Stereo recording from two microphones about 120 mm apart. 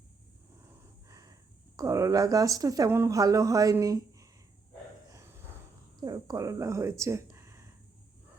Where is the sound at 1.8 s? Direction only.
30° right (ahead or behind).